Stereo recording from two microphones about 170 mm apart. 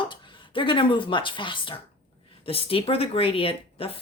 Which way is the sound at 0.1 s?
30° left (ahead or behind).